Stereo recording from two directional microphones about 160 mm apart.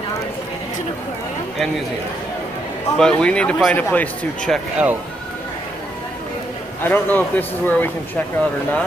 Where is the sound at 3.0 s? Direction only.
5° left (ahead or behind).